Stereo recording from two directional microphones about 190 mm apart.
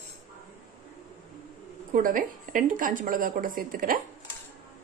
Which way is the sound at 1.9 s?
45° right (ahead or behind).